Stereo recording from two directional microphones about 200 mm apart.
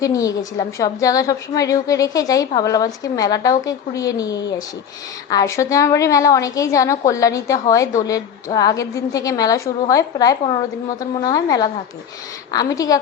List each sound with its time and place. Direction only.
0.0 s a woman's voice: 15° left (ahead or behind)